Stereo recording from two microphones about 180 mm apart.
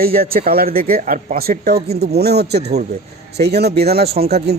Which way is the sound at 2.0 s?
65° right (ahead or behind).